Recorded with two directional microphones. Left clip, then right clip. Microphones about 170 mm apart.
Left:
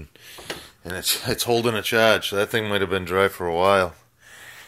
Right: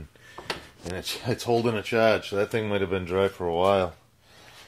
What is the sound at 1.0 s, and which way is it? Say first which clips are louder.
Speech: left 7 dB; centre (ahead or behind).